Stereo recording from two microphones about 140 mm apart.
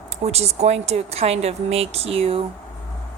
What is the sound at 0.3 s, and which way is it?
Speech, 50° right (ahead or behind).